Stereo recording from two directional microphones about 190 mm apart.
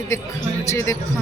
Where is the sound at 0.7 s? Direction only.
15° left (ahead or behind).